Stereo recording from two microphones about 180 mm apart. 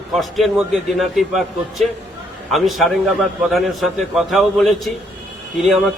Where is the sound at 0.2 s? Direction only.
Centre (ahead or behind).